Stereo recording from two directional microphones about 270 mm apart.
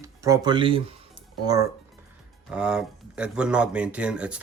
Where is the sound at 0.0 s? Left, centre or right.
Centre.